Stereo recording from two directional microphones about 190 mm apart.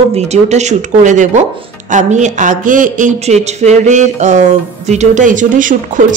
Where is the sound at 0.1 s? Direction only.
35° right (ahead or behind).